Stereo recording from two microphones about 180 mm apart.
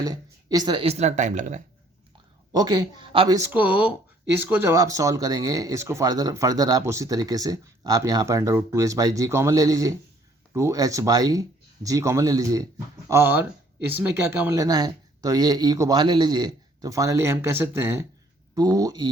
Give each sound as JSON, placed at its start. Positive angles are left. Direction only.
{"t": 0.0, "sound": "speech", "side_deg": -20}
{"t": 2.5, "sound": "speech", "side_deg": -25}
{"t": 3.5, "sound": "speech", "side_deg": -10}